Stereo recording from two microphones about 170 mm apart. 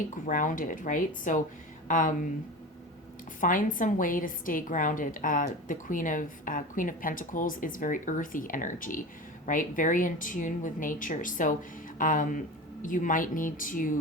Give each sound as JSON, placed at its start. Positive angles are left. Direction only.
{"t": 0.3, "sound": "a woman's voice", "side_deg": 50}
{"t": 3.4, "sound": "a woman's voice", "side_deg": 50}